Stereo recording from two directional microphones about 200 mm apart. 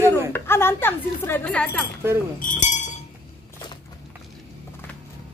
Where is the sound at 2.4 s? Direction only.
40° left (ahead or behind).